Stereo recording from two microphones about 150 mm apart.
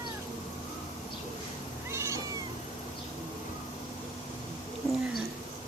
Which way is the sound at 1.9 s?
20° right (ahead or behind).